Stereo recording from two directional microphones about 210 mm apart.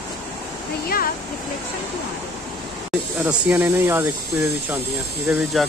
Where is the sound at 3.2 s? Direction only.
10° right (ahead or behind).